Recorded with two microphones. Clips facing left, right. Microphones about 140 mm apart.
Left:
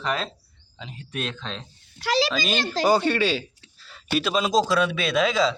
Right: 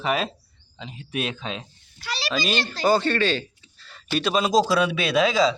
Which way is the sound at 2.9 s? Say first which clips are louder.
Right 1 dB; 10° left (ahead or behind).